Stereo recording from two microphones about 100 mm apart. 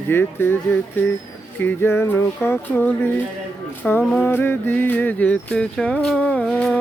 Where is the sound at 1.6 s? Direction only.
20° left (ahead or behind).